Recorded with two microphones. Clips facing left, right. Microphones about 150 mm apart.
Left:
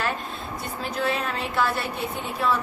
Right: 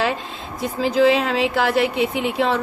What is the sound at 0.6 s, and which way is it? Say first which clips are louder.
Speech: right 12 dB; 90° right.